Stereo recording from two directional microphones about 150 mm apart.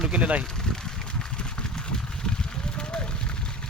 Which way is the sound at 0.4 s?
5° left (ahead or behind).